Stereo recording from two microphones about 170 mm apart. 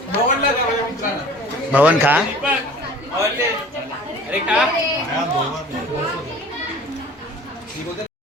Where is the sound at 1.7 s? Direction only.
10° right (ahead or behind).